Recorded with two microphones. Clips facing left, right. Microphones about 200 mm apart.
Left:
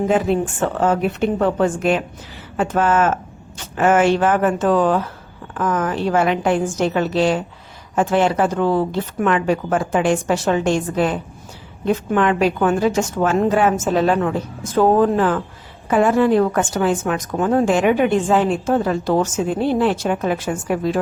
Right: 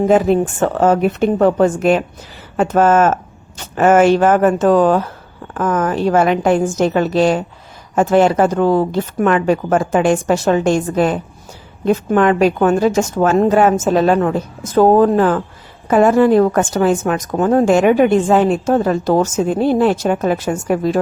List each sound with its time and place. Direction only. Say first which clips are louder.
0.8 s a woman's voice: right 5 dB; 40° right (ahead or behind)